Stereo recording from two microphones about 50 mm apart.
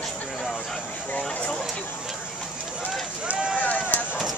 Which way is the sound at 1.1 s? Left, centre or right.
Left.